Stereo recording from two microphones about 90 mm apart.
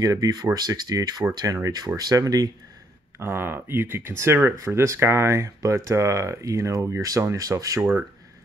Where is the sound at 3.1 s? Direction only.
25° right (ahead or behind).